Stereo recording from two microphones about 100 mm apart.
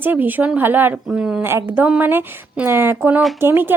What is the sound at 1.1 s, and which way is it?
A woman's voice, 5° right (ahead or behind).